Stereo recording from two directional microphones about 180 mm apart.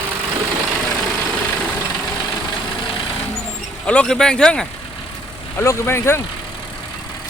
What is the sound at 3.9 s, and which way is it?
Speech, 5° left (ahead or behind).